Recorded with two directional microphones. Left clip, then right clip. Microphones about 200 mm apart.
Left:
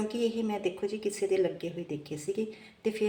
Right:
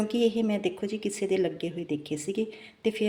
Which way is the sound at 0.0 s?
40° right (ahead or behind).